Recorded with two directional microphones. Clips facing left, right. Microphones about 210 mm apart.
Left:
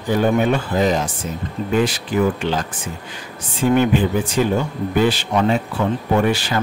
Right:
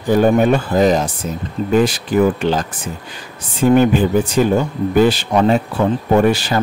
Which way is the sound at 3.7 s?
40° right (ahead or behind).